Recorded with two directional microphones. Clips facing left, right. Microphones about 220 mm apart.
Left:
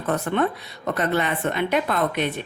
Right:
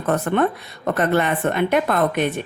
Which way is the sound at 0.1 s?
50° right (ahead or behind).